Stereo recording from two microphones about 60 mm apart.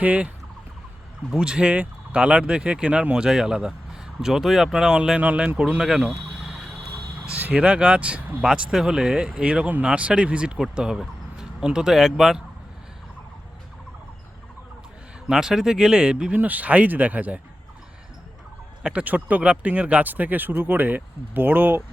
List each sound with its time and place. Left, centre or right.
0.0 s speech: right
1.4 s speech: centre
7.3 s speech: right; by 12.4 s centre
15.3 s speech: centre
16.3 s speech: right
18.8 s speech: centre
19.0 s speech: right